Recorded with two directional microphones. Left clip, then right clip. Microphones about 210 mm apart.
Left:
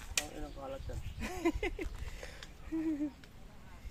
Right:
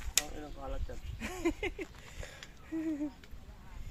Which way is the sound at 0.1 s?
50° right (ahead or behind).